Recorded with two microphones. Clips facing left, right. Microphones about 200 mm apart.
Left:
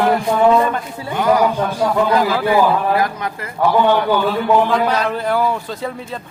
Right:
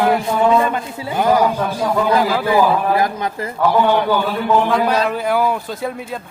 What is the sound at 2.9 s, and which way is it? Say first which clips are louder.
Speech: right 1 dB; 25° right (ahead or behind).